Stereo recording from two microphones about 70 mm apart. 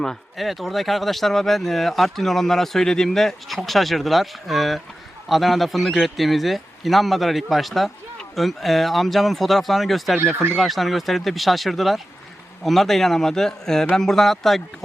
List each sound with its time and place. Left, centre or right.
0.0 s speech: centre